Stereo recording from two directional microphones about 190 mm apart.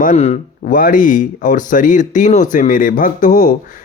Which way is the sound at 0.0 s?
35° left (ahead or behind).